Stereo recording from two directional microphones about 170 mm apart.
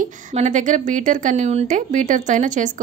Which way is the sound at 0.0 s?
45° right (ahead or behind).